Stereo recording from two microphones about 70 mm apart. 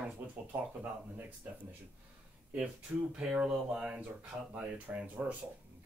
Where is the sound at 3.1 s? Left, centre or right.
Centre.